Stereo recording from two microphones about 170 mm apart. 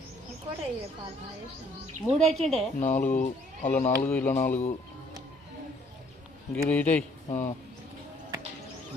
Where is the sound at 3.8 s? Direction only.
10° left (ahead or behind).